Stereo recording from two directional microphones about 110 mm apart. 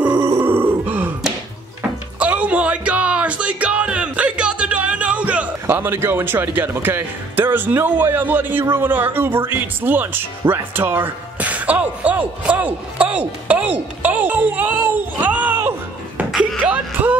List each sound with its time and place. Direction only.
0.0 s grunt: 10° right (ahead or behind)
2.1 s speech: 10° right (ahead or behind)
16.3 s a sound: 5° right (ahead or behind)